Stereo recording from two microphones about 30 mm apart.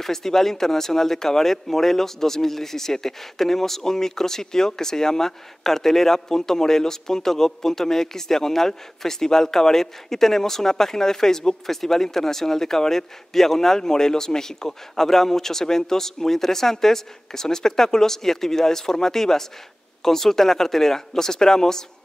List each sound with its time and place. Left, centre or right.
0.0 s speech: centre